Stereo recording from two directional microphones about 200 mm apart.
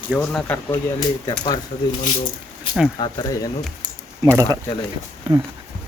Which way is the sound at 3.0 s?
20° left (ahead or behind).